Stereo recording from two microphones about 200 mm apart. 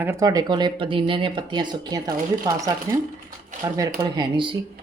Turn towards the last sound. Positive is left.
turn(degrees=-25)  # may be behind; listen again after turning